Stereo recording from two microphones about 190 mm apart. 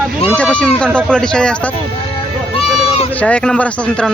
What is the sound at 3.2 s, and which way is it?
Speech, 5° left (ahead or behind).